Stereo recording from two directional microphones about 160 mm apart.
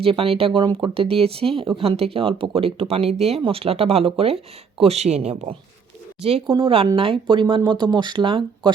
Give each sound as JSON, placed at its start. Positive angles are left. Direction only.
{"t": 0.0, "sound": "speech", "side_deg": -35}
{"t": 6.6, "sound": "speech", "side_deg": -35}